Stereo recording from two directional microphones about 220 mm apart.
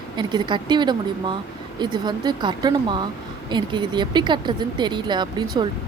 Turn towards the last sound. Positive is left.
turn(degrees=-20)  # may be behind; listen again after turning